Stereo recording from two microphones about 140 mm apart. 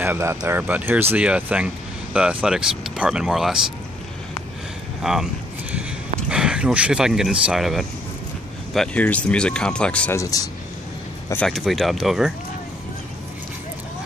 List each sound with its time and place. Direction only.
0.0 s speech: 15° right (ahead or behind)
5.0 s speech: 5° right (ahead or behind)
10.1 s speech: 25° left (ahead or behind)
11.4 s speech: centre (ahead or behind)